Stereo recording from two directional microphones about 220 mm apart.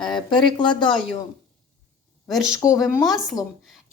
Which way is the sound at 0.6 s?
20° left (ahead or behind).